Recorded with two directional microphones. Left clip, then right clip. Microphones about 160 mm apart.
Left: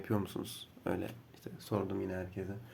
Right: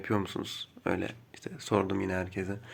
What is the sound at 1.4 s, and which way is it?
Speech, 30° right (ahead or behind).